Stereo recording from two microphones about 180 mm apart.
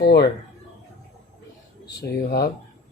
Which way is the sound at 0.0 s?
65° left (ahead or behind).